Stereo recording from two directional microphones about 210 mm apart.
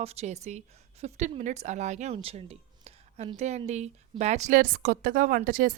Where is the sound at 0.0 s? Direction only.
30° right (ahead or behind).